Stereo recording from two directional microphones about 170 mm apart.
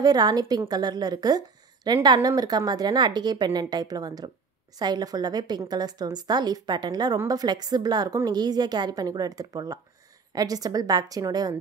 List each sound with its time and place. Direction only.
0.0 s a woman's voice: 20° right (ahead or behind)